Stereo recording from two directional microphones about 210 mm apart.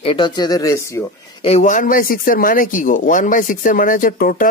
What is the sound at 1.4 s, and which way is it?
Speech, 35° left (ahead or behind).